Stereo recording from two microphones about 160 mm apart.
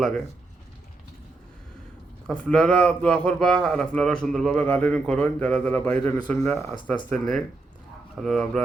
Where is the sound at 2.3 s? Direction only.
5° left (ahead or behind).